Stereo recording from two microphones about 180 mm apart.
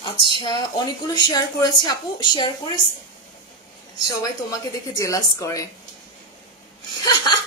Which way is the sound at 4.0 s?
20° left (ahead or behind).